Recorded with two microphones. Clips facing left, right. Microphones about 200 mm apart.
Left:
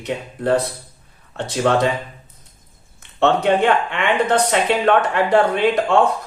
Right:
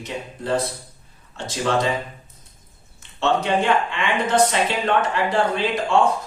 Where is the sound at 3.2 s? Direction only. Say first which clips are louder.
Left 5 dB; 60° left (ahead or behind).